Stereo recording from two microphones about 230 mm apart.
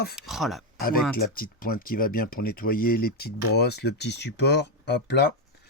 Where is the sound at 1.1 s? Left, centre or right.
Left.